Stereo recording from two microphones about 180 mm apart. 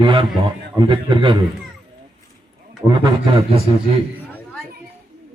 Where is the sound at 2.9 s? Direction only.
25° right (ahead or behind).